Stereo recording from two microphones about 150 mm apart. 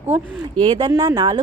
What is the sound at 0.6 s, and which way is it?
Speech, 35° right (ahead or behind).